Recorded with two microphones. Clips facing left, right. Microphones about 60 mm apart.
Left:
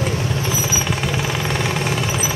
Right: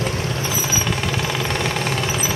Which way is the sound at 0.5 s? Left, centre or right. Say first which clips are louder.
Left 1 dB; centre.